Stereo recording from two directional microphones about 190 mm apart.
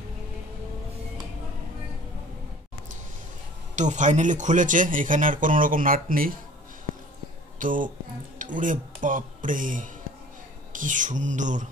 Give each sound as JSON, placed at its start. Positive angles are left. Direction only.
{"t": 3.7, "sound": "speech", "side_deg": -40}
{"t": 7.5, "sound": "speech", "side_deg": -45}
{"t": 10.7, "sound": "a sound", "side_deg": -45}